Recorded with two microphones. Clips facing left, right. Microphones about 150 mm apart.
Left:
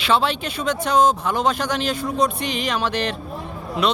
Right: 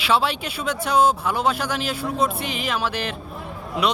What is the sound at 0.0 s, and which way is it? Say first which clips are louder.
Speech: left 1 dB; 10° right (ahead or behind).